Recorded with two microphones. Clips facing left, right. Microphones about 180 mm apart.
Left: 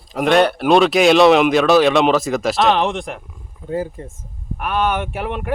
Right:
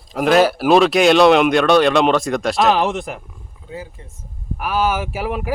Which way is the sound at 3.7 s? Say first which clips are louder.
Left 9 dB; 50° left (ahead or behind).